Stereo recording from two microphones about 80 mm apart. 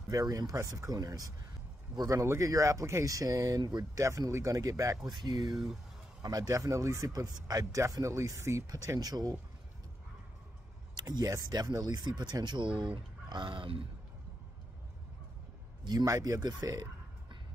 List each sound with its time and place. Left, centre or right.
0.1 s speech: right
2.0 s speech: right
4.0 s speech: right
5.1 s speech: right
5.5 s speech: centre
6.2 s speech: right
11.0 s speech: right
15.8 s a man's voice: right
16.1 s speech: right